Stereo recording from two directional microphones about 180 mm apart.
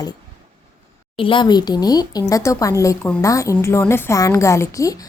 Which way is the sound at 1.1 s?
30° left (ahead or behind).